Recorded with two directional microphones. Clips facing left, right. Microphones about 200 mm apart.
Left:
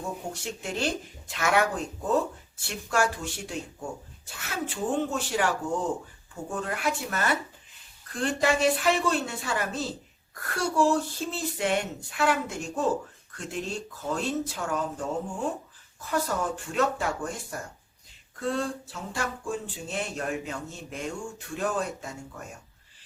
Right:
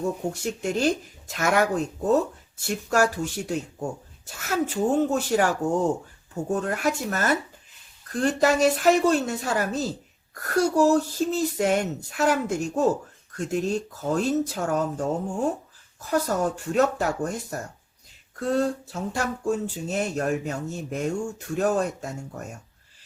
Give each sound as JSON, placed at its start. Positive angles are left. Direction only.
{"t": 0.3, "sound": "speech", "side_deg": -40}